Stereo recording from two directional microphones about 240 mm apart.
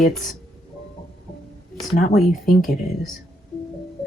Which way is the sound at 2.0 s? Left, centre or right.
Left.